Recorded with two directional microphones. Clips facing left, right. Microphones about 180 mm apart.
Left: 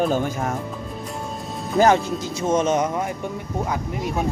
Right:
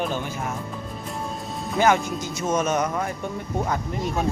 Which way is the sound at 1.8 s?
35° left (ahead or behind).